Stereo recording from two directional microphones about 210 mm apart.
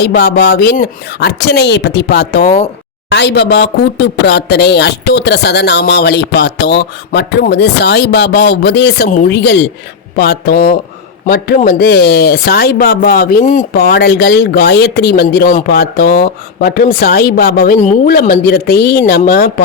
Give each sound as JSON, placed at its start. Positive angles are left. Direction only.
{"t": 0.0, "sound": "speech", "side_deg": 50}
{"t": 13.7, "sound": "speech", "side_deg": 50}